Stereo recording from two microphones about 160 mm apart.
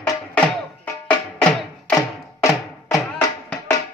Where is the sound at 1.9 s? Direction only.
20° left (ahead or behind).